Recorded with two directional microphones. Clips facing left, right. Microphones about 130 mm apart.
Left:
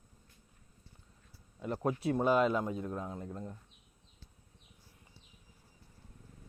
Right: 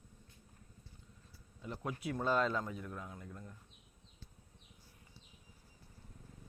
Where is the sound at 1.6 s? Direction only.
55° left (ahead or behind).